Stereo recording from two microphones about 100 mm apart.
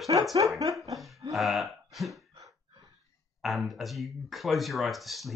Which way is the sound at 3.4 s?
Centre (ahead or behind).